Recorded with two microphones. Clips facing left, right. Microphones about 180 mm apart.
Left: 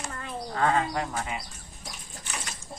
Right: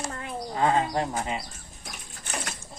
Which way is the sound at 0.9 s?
25° right (ahead or behind).